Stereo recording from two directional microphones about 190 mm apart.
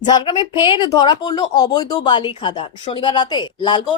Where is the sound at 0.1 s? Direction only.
25° left (ahead or behind).